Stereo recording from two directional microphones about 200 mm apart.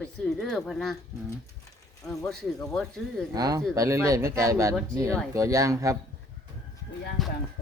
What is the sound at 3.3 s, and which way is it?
Speech, 20° right (ahead or behind).